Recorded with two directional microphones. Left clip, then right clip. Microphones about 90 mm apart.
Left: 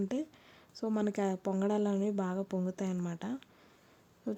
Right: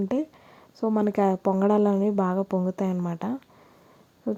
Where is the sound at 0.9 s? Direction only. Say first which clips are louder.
Right 11 dB; 30° right (ahead or behind).